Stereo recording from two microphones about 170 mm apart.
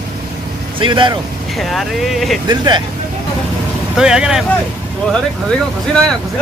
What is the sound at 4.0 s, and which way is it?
Speech, 5° right (ahead or behind).